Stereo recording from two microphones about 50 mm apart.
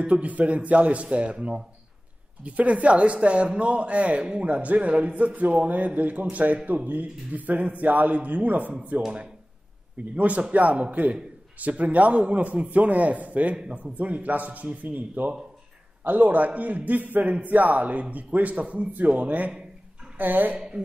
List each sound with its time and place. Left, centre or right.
0.0 s speech: right
10.1 s speech: right
13.9 s speech: right
20.5 s speech: centre